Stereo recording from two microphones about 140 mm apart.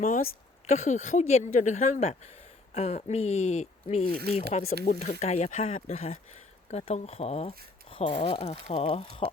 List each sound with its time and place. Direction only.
0.7 s speech: 55° left (ahead or behind); by 8.4 s 35° left (ahead or behind)
8.4 s speech: 50° left (ahead or behind)